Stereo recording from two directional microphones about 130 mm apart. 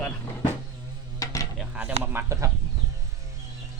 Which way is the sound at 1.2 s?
25° left (ahead or behind).